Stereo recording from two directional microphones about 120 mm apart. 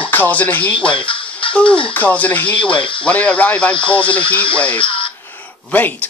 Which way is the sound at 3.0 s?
10° left (ahead or behind).